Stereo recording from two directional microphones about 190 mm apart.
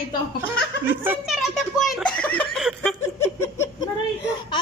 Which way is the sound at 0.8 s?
10° right (ahead or behind).